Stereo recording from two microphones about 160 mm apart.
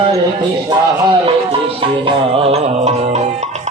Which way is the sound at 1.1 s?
35° right (ahead or behind).